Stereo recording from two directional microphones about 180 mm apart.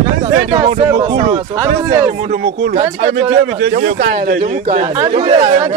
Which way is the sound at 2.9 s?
35° right (ahead or behind).